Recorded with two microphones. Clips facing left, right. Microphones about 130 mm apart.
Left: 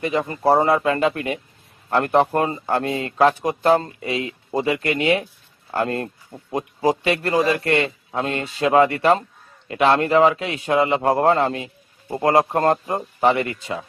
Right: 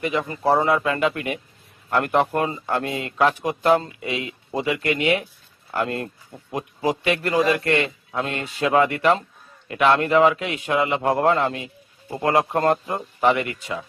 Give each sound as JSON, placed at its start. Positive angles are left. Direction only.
{"t": 0.0, "sound": "a man's voice", "side_deg": 35}